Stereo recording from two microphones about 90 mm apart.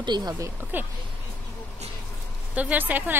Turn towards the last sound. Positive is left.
turn(degrees=-20)  # may be behind; listen again after turning